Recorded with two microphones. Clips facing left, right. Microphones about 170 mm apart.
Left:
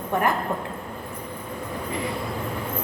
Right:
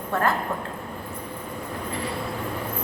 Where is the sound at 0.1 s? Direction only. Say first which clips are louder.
Left 1 dB; 15° left (ahead or behind).